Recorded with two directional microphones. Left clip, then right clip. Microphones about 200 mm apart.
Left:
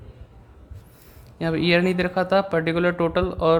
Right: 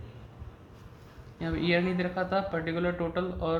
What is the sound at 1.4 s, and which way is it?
Speech, 55° left (ahead or behind).